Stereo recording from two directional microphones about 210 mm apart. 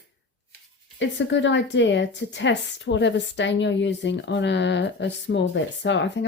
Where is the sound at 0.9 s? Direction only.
60° left (ahead or behind).